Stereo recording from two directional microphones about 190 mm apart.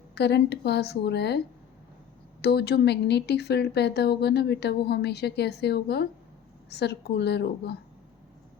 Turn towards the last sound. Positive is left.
turn(degrees=60)  # may be behind; listen again after turning